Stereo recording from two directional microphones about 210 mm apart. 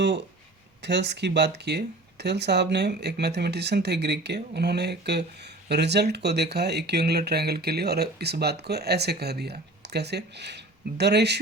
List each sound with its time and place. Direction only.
0.8 s speech: 55° right (ahead or behind)